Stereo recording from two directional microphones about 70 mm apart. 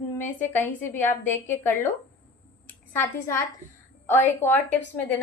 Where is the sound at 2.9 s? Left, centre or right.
Left.